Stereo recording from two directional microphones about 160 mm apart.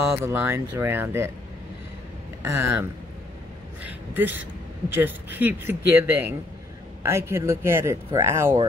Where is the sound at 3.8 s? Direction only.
10° right (ahead or behind).